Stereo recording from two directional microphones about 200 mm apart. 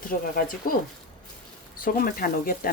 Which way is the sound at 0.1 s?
45° left (ahead or behind).